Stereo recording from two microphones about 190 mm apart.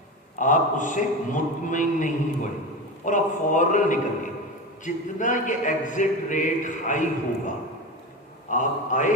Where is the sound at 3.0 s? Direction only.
40° left (ahead or behind).